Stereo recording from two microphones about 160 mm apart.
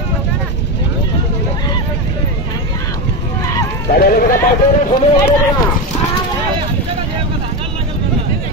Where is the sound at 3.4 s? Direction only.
20° left (ahead or behind).